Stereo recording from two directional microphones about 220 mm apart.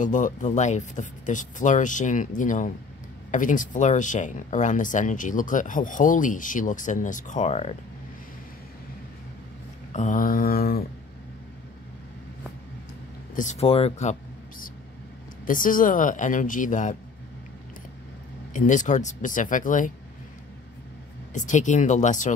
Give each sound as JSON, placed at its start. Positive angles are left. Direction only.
{"t": 0.0, "sound": "speech", "side_deg": 35}
{"t": 9.9, "sound": "speech", "side_deg": 35}
{"t": 13.3, "sound": "speech", "side_deg": 35}
{"t": 15.4, "sound": "speech", "side_deg": 40}
{"t": 18.5, "sound": "speech", "side_deg": 35}
{"t": 21.3, "sound": "speech", "side_deg": 35}